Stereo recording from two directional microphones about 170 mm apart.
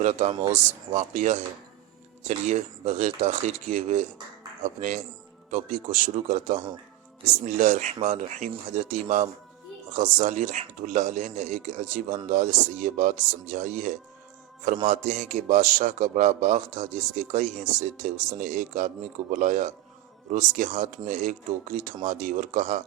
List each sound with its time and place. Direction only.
0.0 s speech: 40° right (ahead or behind)